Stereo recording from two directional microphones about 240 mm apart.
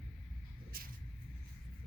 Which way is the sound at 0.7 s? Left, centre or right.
Right.